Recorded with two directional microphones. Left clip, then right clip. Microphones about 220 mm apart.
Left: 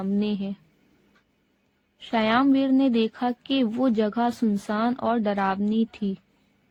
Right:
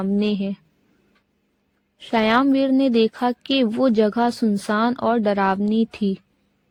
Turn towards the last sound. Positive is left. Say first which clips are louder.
# right 5 dB
turn(degrees=-50)  # may be behind; listen again after turning